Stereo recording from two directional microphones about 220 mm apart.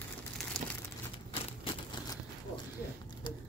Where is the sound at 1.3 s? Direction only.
25° left (ahead or behind).